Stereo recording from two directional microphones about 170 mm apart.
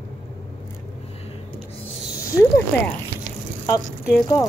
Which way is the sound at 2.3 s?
15° left (ahead or behind).